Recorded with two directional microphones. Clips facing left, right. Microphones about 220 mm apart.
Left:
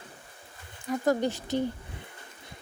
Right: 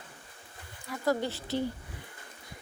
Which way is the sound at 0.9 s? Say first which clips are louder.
Left 4 dB; 20° left (ahead or behind).